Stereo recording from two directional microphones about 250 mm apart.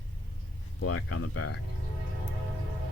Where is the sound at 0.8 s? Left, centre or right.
Left.